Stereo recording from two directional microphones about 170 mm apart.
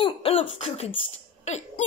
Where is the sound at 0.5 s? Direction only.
35° left (ahead or behind).